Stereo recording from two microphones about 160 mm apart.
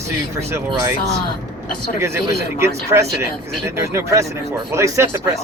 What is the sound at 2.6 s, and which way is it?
Speech, 15° right (ahead or behind).